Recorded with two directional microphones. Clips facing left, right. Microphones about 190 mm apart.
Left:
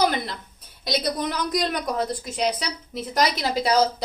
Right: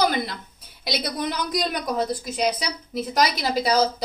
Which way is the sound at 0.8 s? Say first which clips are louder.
Left 2 dB; 5° right (ahead or behind).